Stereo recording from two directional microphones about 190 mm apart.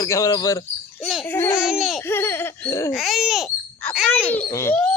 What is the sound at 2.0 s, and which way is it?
Laughter, 10° left (ahead or behind).